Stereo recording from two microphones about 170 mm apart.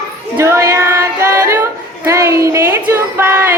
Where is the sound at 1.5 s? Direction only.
15° right (ahead or behind).